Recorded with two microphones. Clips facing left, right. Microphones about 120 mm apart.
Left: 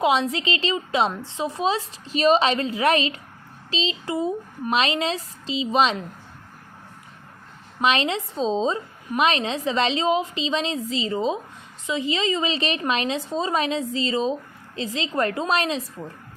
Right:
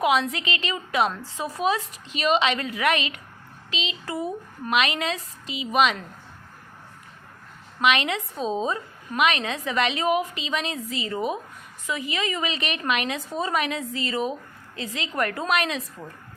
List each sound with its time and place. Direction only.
0.0 s a woman's voice: 30° left (ahead or behind)
7.8 s a woman's voice: 30° left (ahead or behind)